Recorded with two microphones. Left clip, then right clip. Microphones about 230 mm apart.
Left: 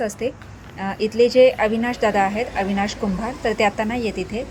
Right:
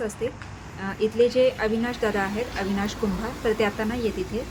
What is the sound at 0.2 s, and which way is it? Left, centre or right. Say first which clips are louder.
A woman's voice: left 4 dB; left.